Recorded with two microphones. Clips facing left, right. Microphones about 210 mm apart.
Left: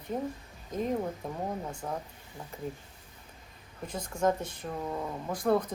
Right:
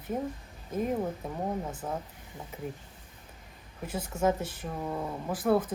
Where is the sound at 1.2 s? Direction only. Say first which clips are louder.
Right 2 dB; 5° right (ahead or behind).